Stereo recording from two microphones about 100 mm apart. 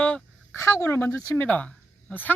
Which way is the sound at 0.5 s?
25° left (ahead or behind).